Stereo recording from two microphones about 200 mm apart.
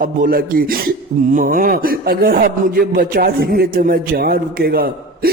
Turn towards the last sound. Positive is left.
turn(degrees=-50)  # may be behind; listen again after turning